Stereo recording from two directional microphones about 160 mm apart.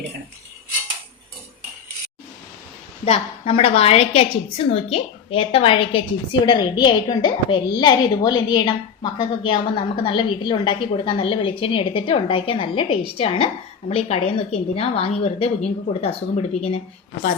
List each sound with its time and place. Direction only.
3.0 s a woman's voice: 40° left (ahead or behind)